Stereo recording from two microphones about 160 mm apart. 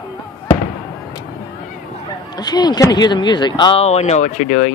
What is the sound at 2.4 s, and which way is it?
Speech, 25° left (ahead or behind).